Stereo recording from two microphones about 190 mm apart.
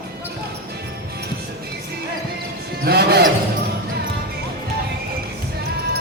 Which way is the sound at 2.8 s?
60° right (ahead or behind).